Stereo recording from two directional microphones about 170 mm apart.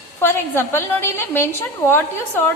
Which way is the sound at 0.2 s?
15° left (ahead or behind).